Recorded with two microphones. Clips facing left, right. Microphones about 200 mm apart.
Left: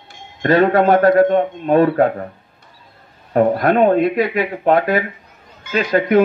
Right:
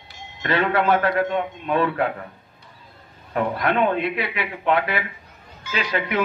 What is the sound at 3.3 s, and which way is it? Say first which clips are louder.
Speech: left 8 dB; 40° left (ahead or behind).